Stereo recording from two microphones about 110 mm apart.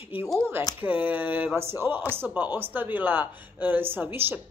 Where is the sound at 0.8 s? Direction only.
15° right (ahead or behind).